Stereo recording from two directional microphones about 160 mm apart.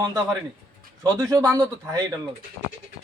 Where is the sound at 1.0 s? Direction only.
20° right (ahead or behind).